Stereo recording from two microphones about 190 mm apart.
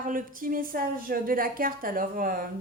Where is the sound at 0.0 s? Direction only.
45° right (ahead or behind).